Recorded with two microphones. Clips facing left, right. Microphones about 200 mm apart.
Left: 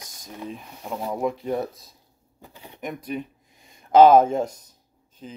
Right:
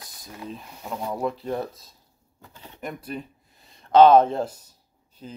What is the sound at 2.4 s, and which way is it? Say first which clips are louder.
Speech: left 2 dB; 15° left (ahead or behind).